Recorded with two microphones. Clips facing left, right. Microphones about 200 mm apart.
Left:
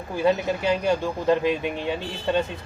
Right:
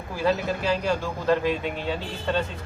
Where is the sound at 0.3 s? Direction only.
20° left (ahead or behind).